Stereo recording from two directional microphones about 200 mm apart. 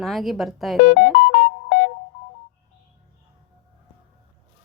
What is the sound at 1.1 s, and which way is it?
Music, 50° left (ahead or behind).